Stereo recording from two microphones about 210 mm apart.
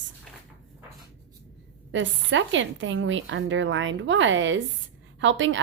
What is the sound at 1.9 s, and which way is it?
A woman's voice, 65° right (ahead or behind).